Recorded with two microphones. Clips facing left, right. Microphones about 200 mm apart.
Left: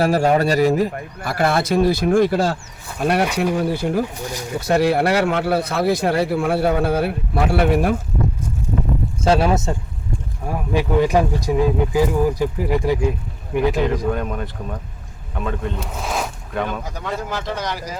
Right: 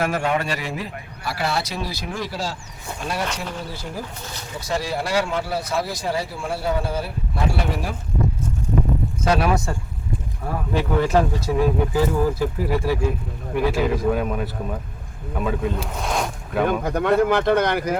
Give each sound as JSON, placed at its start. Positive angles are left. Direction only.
{"t": 0.0, "sound": "a man's voice", "side_deg": 35}
{"t": 4.2, "sound": "speech", "side_deg": 10}
{"t": 4.6, "sound": "speech", "side_deg": 60}
{"t": 9.2, "sound": "speech", "side_deg": 25}
{"t": 13.8, "sound": "speech", "side_deg": -5}
{"t": 16.8, "sound": "speech", "side_deg": -60}